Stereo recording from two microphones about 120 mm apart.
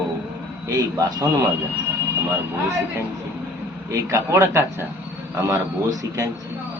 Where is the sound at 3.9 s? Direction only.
25° right (ahead or behind).